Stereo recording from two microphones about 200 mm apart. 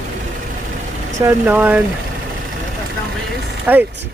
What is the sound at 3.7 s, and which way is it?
Speech, 10° right (ahead or behind).